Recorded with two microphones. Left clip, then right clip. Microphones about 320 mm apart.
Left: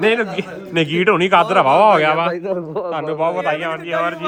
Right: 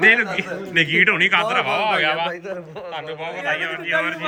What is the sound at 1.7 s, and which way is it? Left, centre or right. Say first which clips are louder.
A man's voice: left 7 dB; centre.